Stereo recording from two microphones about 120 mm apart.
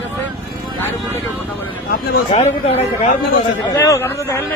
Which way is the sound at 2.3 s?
65° left (ahead or behind).